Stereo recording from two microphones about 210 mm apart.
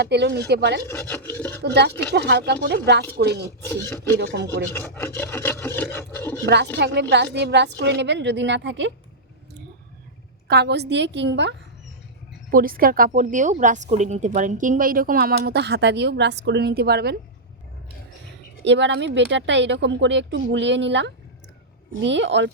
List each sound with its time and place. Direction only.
0.0 s speech: 55° right (ahead or behind)
0.9 s rub: 10° left (ahead or behind)
1.6 s speech: 50° right (ahead or behind)
1.9 s rub: 10° left (ahead or behind)
2.1 s speech: 50° right (ahead or behind)
3.6 s rub: 10° left (ahead or behind)
6.7 s speech: 55° right (ahead or behind)
10.5 s speech: 50° right (ahead or behind)
12.5 s speech: 45° right (ahead or behind)
18.6 s speech: 60° right (ahead or behind)